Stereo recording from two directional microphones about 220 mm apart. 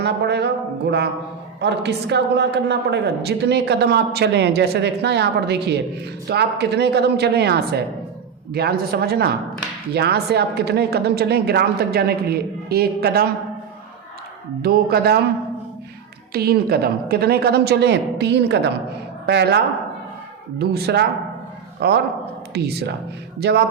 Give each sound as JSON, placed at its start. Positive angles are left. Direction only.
{"t": 0.0, "sound": "a woman's voice", "side_deg": -50}
{"t": 14.6, "sound": "a woman's voice", "side_deg": -45}
{"t": 16.3, "sound": "a woman's voice", "side_deg": -45}